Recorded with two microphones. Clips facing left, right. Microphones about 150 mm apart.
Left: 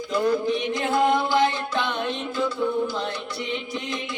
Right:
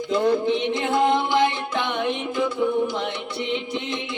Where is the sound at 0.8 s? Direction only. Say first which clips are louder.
Left 2 dB; 20° right (ahead or behind).